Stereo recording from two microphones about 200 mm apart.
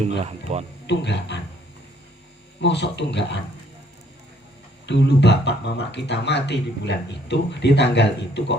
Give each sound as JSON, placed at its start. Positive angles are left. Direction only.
{"t": 0.5, "sound": "speech", "side_deg": -35}
{"t": 0.9, "sound": "speech", "side_deg": 60}
{"t": 2.6, "sound": "speech", "side_deg": 60}
{"t": 4.9, "sound": "speech", "side_deg": 60}